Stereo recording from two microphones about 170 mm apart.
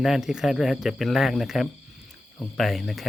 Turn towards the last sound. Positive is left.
turn(degrees=0)  # may be behind; listen again after turning